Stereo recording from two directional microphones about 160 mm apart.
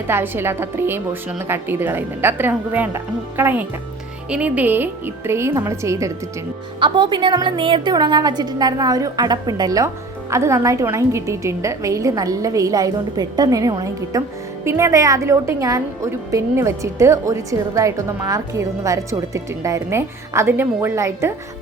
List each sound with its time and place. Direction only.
0.1 s a woman's voice: 15° right (ahead or behind)
6.7 s a woman's voice: 30° right (ahead or behind)